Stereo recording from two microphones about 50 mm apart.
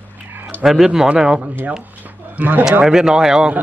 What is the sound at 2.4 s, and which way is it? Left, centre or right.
Speech, right.